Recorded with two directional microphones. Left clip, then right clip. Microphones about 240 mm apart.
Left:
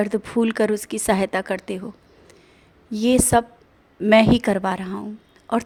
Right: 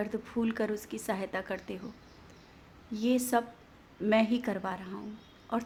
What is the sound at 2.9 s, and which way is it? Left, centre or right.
A woman's voice, left.